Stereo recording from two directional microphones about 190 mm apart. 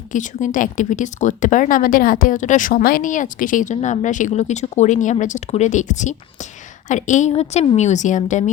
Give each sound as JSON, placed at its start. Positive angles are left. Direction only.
{"t": 0.1, "sound": "speech", "side_deg": 40}